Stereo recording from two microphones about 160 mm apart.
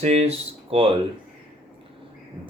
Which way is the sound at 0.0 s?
40° right (ahead or behind).